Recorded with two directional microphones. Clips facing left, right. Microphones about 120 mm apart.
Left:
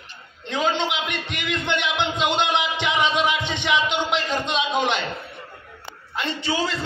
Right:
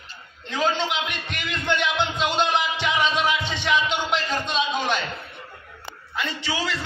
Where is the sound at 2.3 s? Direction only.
20° left (ahead or behind).